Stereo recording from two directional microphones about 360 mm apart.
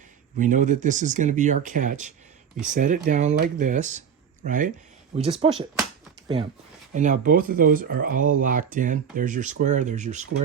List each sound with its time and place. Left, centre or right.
0.3 s speech: right
5.5 s speech: centre
6.9 s speech: right